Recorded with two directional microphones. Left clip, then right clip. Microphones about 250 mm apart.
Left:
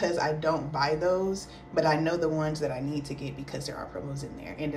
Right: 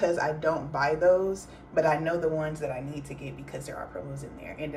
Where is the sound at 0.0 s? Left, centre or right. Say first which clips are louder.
Right 1 dB; centre.